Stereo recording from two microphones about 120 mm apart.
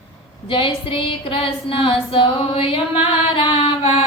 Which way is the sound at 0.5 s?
50° left (ahead or behind).